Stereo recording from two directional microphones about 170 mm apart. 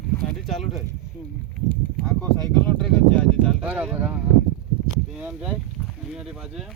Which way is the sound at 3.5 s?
10° right (ahead or behind).